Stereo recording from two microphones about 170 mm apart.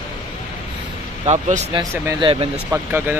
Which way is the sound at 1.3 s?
45° right (ahead or behind).